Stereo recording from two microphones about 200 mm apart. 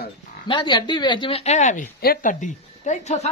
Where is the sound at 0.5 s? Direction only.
25° left (ahead or behind).